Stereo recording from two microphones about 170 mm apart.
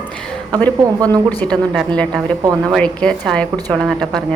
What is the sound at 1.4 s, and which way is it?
A woman's voice, 5° left (ahead or behind).